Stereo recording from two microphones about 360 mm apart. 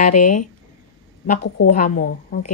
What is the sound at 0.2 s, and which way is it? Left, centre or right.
Speech, left.